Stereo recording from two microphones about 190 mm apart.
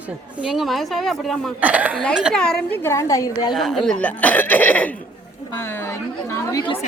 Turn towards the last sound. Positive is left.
turn(degrees=20)  # may be behind; listen again after turning